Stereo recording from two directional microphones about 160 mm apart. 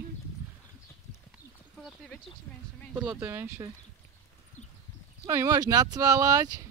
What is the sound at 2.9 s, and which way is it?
Speech, 10° right (ahead or behind).